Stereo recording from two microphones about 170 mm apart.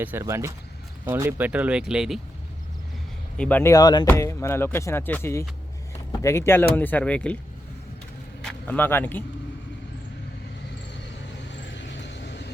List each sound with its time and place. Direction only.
0.0 s speech: 15° right (ahead or behind)
3.3 s speech: 10° left (ahead or behind)
8.4 s speech: 10° left (ahead or behind)
11.4 s vehicle: 90° left